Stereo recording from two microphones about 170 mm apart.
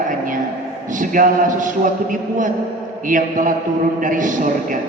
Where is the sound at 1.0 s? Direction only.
50° right (ahead or behind).